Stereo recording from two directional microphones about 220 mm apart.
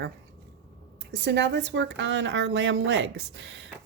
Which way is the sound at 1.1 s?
55° right (ahead or behind).